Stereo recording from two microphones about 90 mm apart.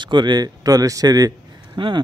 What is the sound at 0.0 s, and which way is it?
Speech, 60° right (ahead or behind).